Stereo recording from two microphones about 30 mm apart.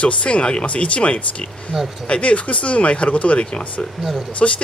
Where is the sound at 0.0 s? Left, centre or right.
Left.